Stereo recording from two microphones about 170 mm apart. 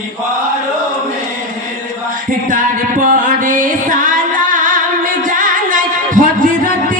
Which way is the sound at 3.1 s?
50° right (ahead or behind).